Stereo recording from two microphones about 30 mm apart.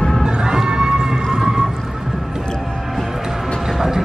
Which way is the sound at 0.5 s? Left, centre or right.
Right.